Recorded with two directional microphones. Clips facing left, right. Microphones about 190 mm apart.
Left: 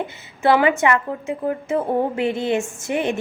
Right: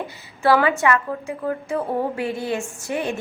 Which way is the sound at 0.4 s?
20° left (ahead or behind).